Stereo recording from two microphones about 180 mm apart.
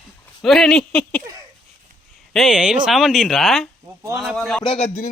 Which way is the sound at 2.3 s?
Centre (ahead or behind).